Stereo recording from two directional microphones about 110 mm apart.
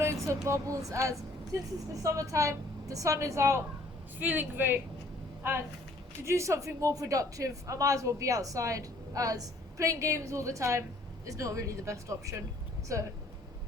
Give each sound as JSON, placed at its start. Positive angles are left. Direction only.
{"t": 0.0, "sound": "a woman's voice", "side_deg": -25}